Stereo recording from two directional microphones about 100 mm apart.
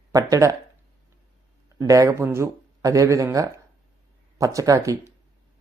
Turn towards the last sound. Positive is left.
turn(degrees=-35)  # may be behind; listen again after turning